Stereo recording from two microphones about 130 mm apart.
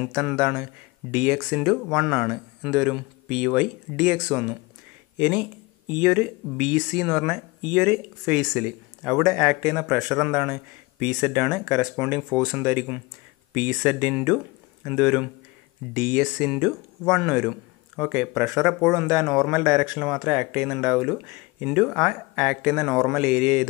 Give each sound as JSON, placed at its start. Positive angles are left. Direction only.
{"t": 0.4, "sound": "speech", "side_deg": -5}
{"t": 9.9, "sound": "a man's voice", "side_deg": -5}
{"t": 12.5, "sound": "speech", "side_deg": -15}
{"t": 22.1, "sound": "speech", "side_deg": -15}